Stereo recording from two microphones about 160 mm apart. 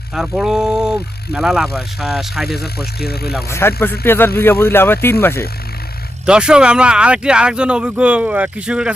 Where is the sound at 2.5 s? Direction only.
80° left.